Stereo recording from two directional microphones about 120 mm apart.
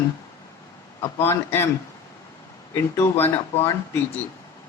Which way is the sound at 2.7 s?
20° left (ahead or behind).